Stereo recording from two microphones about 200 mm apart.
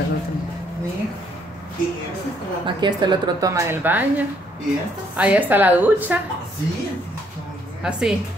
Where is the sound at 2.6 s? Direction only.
20° right (ahead or behind).